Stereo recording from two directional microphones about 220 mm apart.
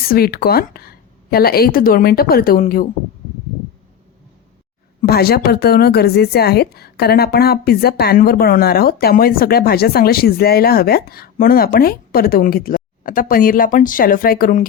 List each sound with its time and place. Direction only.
0.0 s a woman's voice: 45° left (ahead or behind)
5.0 s a woman's voice: 45° left (ahead or behind)